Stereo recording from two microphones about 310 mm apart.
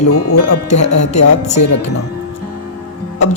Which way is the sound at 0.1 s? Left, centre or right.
Left.